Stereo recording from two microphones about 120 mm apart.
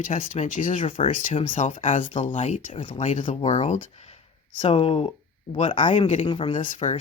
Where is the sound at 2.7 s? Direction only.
45° left (ahead or behind).